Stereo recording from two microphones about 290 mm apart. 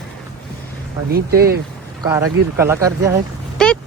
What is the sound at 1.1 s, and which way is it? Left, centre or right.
Speech, right.